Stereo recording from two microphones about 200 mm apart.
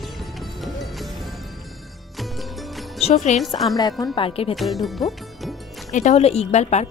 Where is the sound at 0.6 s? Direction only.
Centre (ahead or behind).